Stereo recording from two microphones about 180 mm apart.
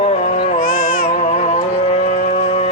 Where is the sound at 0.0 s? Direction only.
35° left (ahead or behind).